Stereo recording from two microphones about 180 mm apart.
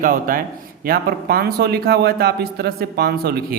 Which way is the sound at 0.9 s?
60° right (ahead or behind).